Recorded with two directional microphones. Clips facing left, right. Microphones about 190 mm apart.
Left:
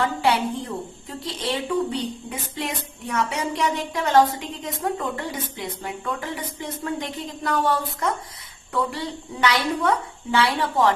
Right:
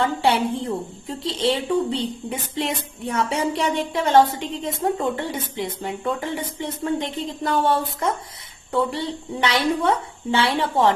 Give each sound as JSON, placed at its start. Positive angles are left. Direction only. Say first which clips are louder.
{"t": 0.0, "sound": "a woman's voice", "louder": "right 2 dB", "side_deg": -25}